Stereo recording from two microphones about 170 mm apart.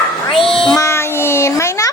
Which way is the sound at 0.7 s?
15° left (ahead or behind).